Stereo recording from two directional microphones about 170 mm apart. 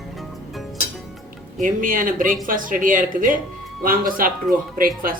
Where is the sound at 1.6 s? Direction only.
55° right (ahead or behind).